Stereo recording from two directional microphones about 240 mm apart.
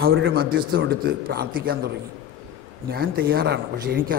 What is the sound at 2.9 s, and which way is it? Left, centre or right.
A man's voice, right.